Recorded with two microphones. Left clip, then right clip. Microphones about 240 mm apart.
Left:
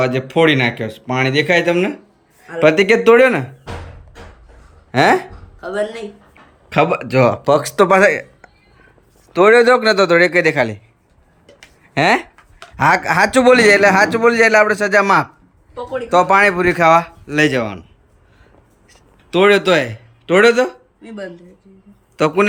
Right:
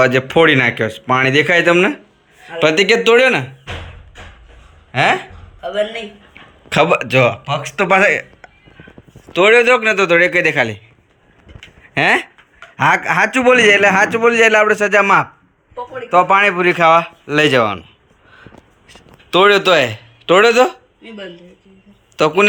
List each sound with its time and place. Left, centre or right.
0.0 s a man's voice: centre
4.9 s speech: left
6.7 s a man's voice: centre
7.8 s a sound: centre
9.3 s a man's voice: centre
18.3 s a sound: centre
22.1 s a man's voice: centre